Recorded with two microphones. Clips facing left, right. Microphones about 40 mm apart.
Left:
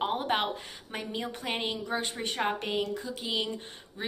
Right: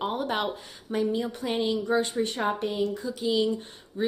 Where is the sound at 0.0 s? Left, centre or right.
Left.